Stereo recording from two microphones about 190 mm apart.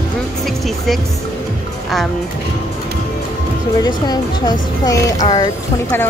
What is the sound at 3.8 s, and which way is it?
Speech, 20° left (ahead or behind).